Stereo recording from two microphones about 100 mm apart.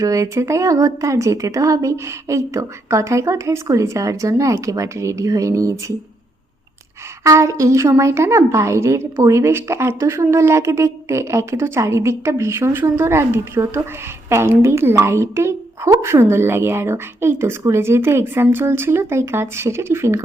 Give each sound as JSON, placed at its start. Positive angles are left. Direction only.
{"t": 0.0, "sound": "speech", "side_deg": -35}
{"t": 7.3, "sound": "a woman's voice", "side_deg": -30}